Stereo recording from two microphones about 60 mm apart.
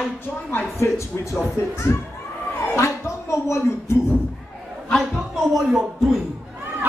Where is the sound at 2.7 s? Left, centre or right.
Left.